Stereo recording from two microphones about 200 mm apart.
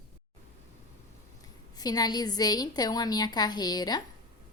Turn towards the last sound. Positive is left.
turn(degrees=20)  # may be behind; listen again after turning